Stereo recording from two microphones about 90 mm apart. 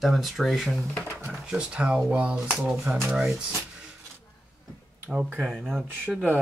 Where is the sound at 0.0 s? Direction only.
Centre (ahead or behind).